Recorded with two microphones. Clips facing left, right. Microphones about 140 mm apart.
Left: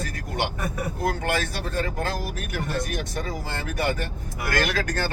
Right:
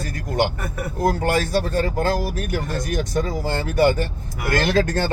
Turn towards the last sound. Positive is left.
turn(degrees=-25)  # may be behind; listen again after turning